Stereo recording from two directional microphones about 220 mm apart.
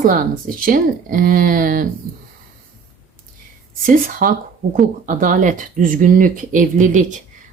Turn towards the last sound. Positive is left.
turn(degrees=-35)  # may be behind; listen again after turning